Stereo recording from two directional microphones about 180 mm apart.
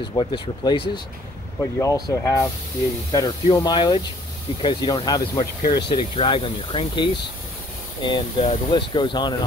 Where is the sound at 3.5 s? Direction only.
25° left (ahead or behind).